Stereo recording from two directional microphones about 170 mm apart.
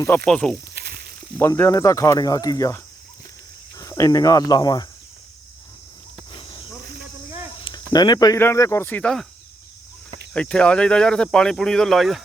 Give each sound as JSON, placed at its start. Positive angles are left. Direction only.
{"t": 0.3, "sound": "speech", "side_deg": 5}
{"t": 0.7, "sound": "snake", "side_deg": -70}
{"t": 1.4, "sound": "speech", "side_deg": 15}
{"t": 6.3, "sound": "cricket", "side_deg": 30}
{"t": 7.6, "sound": "speech", "side_deg": 25}
{"t": 10.3, "sound": "speech", "side_deg": 5}